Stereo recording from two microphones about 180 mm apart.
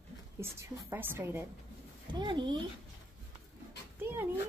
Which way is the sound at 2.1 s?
25° right (ahead or behind).